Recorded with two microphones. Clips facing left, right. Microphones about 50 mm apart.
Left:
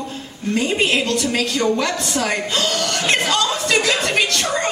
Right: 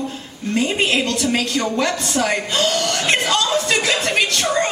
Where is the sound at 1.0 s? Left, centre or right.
Right.